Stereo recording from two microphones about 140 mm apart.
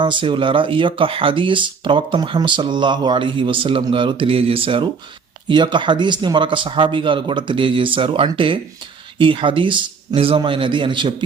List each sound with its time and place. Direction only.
0.0 s speech: 35° right (ahead or behind)